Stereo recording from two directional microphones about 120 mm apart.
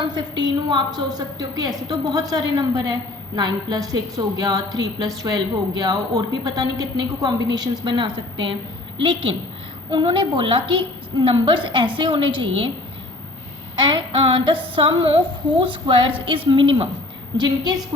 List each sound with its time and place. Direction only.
0.0 s a woman's voice: 35° right (ahead or behind)
13.7 s a woman's voice: 40° right (ahead or behind)
17.3 s a woman's voice: 35° right (ahead or behind)